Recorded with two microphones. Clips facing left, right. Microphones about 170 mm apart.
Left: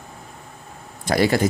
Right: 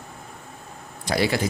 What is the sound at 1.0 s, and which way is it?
Speech, 50° left (ahead or behind).